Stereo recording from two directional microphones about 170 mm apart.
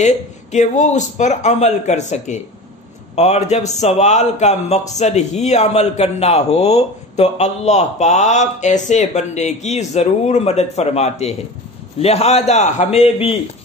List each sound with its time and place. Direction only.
0.0 s a man's voice: 45° left (ahead or behind)